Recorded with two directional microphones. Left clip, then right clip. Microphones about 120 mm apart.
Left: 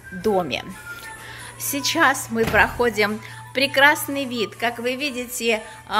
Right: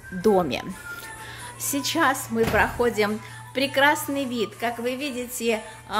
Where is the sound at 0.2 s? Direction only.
65° right (ahead or behind).